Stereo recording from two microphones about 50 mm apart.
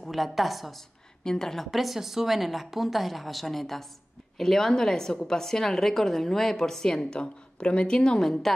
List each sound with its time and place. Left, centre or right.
0.0 s a woman's voice: centre
1.2 s a woman's voice: centre